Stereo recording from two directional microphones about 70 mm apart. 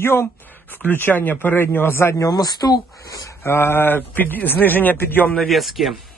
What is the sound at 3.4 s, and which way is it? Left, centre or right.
Speech, left.